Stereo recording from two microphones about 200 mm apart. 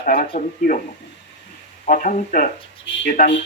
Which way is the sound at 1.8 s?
40° left (ahead or behind).